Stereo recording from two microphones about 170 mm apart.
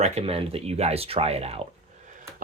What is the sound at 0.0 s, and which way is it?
Speech, 40° right (ahead or behind).